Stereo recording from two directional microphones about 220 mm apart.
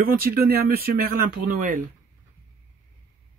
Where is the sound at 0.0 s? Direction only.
40° right (ahead or behind).